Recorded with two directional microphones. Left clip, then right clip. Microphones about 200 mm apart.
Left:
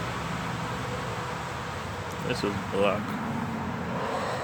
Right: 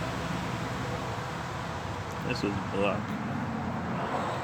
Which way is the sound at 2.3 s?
15° left (ahead or behind).